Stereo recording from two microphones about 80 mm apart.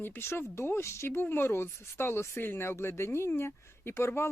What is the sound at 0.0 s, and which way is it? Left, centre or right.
Speech, left.